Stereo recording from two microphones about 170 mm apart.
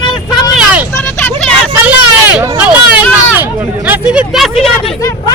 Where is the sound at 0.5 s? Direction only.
10° right (ahead or behind).